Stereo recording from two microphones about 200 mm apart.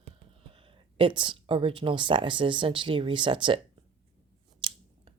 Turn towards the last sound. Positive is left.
turn(degrees=-25)  # may be behind; listen again after turning